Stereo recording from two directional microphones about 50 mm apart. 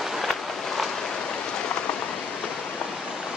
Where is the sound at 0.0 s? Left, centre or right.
Centre; by 2.8 s left.